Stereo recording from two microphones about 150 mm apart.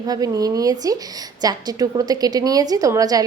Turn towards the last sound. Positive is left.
turn(degrees=-25)  # may be behind; listen again after turning